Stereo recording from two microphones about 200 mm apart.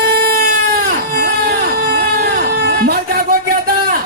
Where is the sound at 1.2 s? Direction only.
50° right (ahead or behind).